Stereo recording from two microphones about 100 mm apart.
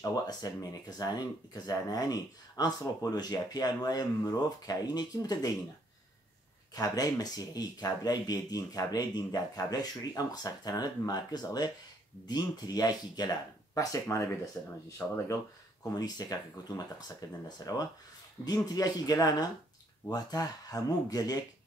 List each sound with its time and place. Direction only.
0.0 s speech: 40° left (ahead or behind)
6.7 s speech: 40° left (ahead or behind); by 14.7 s 20° left (ahead or behind)
15.9 s speech: 40° left (ahead or behind)